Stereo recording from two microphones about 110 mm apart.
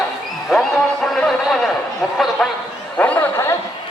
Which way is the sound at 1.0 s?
Centre (ahead or behind).